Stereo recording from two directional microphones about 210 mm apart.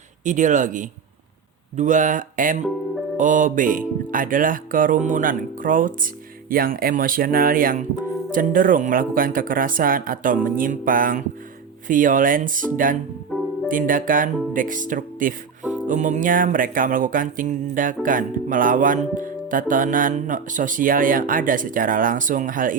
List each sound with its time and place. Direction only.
0.3 s music: 35° right (ahead or behind)
6.5 s speech: 45° right (ahead or behind)
8.3 s music: 40° right (ahead or behind)